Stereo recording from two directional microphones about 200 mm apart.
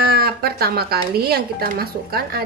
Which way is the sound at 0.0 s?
50° right (ahead or behind).